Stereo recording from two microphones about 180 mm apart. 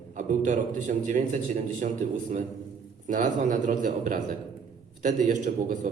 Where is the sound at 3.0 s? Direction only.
45° right (ahead or behind).